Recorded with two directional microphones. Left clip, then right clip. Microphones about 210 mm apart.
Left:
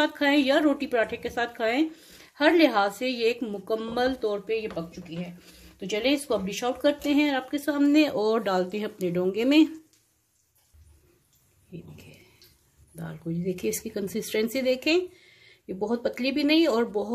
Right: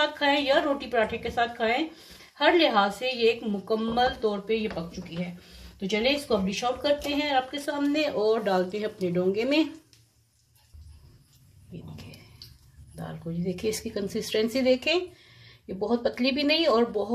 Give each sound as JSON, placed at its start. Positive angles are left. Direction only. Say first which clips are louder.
{"t": 0.0, "sound": "a woman's voice", "louder": "left 1 dB", "side_deg": 55}
{"t": 5.8, "sound": "speech", "louder": "even", "side_deg": 55}
{"t": 12.9, "sound": "speech", "louder": "left 1 dB", "side_deg": 30}